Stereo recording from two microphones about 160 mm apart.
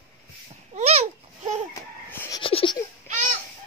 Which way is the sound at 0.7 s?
45° right (ahead or behind).